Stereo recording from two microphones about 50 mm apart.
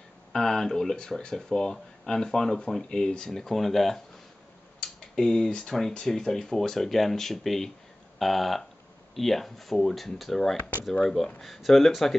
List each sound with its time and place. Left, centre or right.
0.3 s speech: centre
4.7 s a sound: centre
5.8 s speech: centre
10.6 s speech: left
11.4 s speech: centre